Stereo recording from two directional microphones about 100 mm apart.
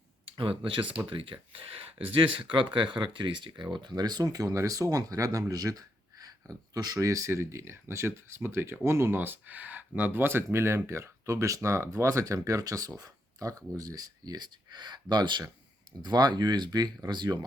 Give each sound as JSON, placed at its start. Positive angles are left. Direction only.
{"t": 0.3, "sound": "speech", "side_deg": -60}